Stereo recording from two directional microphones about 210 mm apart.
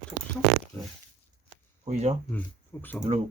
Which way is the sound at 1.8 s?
30° right (ahead or behind).